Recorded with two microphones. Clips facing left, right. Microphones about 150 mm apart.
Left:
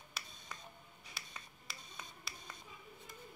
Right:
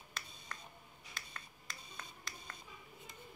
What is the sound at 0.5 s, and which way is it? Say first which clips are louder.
Camera: even; 5° left (ahead or behind).